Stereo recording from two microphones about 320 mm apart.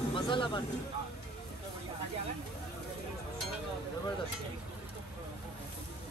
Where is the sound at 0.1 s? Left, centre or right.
Centre.